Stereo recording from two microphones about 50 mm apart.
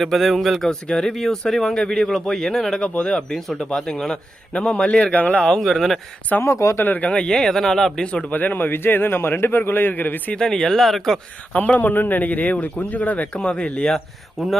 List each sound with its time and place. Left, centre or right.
0.0 s speech: centre
0.7 s speech: centre
2.8 s speech: centre
4.5 s speech: left
5.1 s speech: left
5.4 s speech: centre
6.4 s speech: left
6.7 s speech: left
7.0 s speech: centre
8.3 s a man's voice: left
10.3 s speech: centre
11.5 s speech: left
14.3 s speech: centre